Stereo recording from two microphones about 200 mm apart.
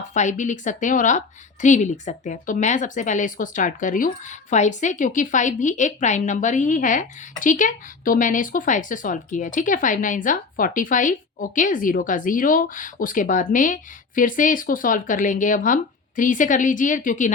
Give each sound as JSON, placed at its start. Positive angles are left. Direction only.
{"t": 0.1, "sound": "a woman's voice", "side_deg": 35}